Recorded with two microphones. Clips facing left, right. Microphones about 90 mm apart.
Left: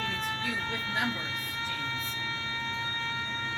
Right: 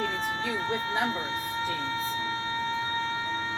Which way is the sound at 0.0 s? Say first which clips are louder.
Right 4 dB; 30° right (ahead or behind).